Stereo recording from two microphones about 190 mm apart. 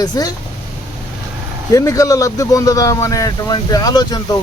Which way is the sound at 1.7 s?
15° left (ahead or behind).